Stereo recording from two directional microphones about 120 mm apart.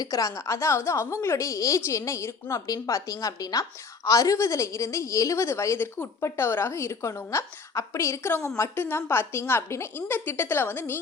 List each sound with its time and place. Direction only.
0.0 s a woman's voice: 30° left (ahead or behind)